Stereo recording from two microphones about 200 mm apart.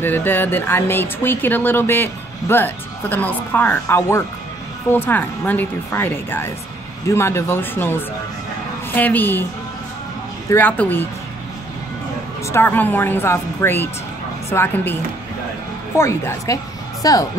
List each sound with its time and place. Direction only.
0.0 s speech: 10° left (ahead or behind)
10.5 s speech: 10° left (ahead or behind)
12.4 s speech: 10° left (ahead or behind)
16.0 s speech: 15° left (ahead or behind)